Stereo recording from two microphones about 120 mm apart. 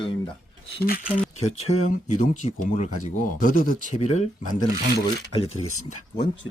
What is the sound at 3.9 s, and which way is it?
Speech, 70° left (ahead or behind).